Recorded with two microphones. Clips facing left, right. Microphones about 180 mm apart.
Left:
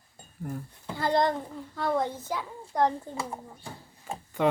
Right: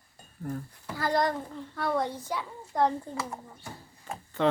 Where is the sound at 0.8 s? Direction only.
25° left (ahead or behind).